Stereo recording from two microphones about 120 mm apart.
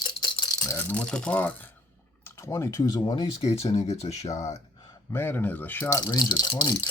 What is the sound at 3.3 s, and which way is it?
Speech, 60° left (ahead or behind).